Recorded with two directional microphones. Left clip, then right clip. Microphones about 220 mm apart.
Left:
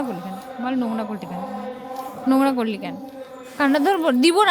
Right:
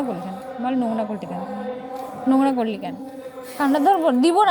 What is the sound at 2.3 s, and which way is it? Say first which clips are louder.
A woman's voice: even; 15° left (ahead or behind).